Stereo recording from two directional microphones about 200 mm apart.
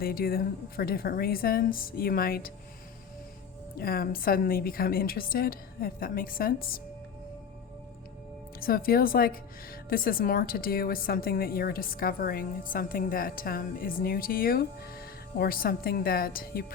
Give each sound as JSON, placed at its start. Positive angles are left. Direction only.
{"t": 0.0, "sound": "a woman's voice", "side_deg": 50}
{"t": 3.8, "sound": "a woman's voice", "side_deg": 50}
{"t": 8.6, "sound": "a woman's voice", "side_deg": 45}